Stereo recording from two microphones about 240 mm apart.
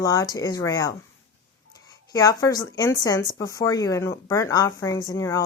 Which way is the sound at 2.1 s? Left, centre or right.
Centre.